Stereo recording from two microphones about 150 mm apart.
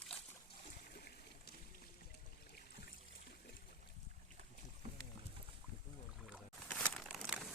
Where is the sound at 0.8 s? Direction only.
90° left.